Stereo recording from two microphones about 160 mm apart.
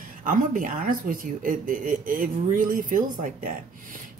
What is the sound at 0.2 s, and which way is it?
Speech, 55° right (ahead or behind).